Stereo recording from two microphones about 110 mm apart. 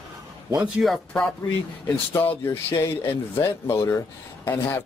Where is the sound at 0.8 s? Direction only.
10° right (ahead or behind).